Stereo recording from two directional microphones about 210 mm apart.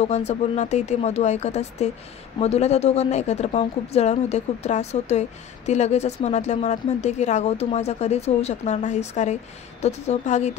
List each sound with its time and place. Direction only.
0.0 s a woman's voice: 30° left (ahead or behind)